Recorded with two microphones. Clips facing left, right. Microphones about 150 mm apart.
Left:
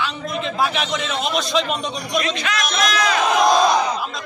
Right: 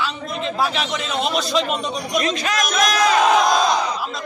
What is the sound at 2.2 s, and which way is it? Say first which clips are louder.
Speech: right 1 dB; 40° right (ahead or behind).